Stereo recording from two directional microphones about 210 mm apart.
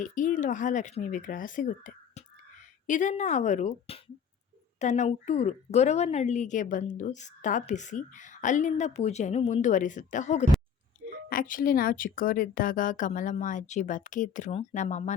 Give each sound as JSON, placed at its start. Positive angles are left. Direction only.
{"t": 0.0, "sound": "a woman's voice", "side_deg": 35}